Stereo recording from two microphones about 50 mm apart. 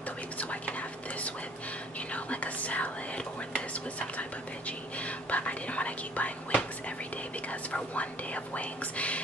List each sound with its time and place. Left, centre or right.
0.4 s speech: left
4.2 s speech: left
7.7 s speech: left